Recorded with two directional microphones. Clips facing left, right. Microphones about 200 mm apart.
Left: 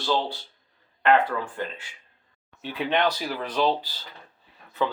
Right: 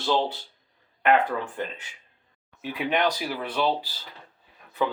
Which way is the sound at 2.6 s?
10° right (ahead or behind).